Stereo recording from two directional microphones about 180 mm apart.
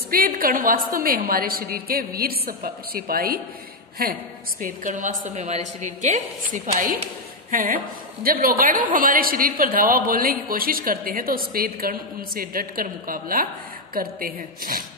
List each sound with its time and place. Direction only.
0.1 s a woman's voice: 55° right (ahead or behind)